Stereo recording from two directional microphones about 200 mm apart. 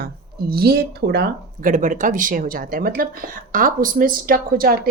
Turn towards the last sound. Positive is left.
turn(degrees=-45)  # may be behind; listen again after turning